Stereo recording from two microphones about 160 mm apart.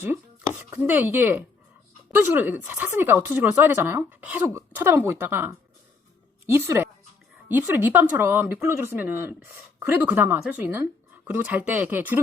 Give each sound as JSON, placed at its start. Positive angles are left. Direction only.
{"t": 0.7, "sound": "a woman's voice", "side_deg": -10}